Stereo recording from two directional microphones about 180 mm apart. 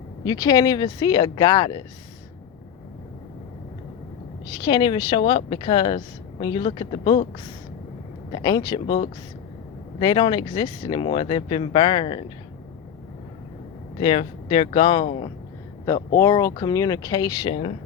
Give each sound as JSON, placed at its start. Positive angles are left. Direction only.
{"t": 0.3, "sound": "speech", "side_deg": 20}
{"t": 4.6, "sound": "speech", "side_deg": 25}
{"t": 8.3, "sound": "speech", "side_deg": 25}
{"t": 10.0, "sound": "speech", "side_deg": 25}
{"t": 14.0, "sound": "speech", "side_deg": 30}
{"t": 15.9, "sound": "speech", "side_deg": 15}
{"t": 17.5, "sound": "speech", "side_deg": 35}